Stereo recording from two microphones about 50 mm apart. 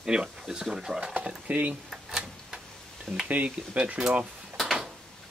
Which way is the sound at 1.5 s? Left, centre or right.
Right.